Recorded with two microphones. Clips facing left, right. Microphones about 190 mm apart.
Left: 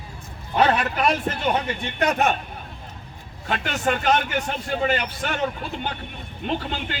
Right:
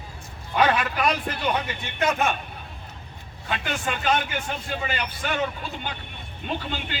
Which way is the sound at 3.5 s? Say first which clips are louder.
Left 4 dB; 50° left (ahead or behind).